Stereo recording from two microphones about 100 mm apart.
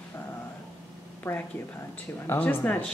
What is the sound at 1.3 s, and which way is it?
Speech, 25° left (ahead or behind).